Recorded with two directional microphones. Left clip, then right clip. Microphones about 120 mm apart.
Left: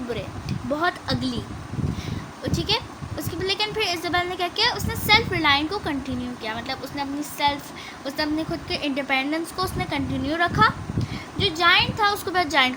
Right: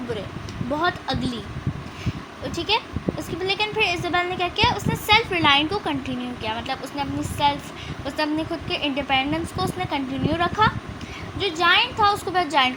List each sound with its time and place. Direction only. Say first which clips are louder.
0.8 s a woman's voice: right 1 dB; 20° left (ahead or behind)
2.4 s a woman's voice: right 2 dB; 15° left (ahead or behind)